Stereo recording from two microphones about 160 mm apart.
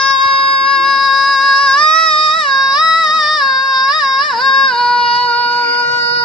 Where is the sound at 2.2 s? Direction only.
Centre (ahead or behind).